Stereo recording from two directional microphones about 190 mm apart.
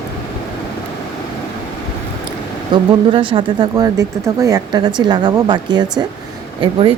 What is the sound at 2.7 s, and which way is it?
Speech, 25° right (ahead or behind).